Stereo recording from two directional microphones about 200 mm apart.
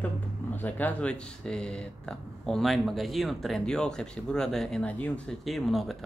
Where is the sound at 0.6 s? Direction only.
10° left (ahead or behind).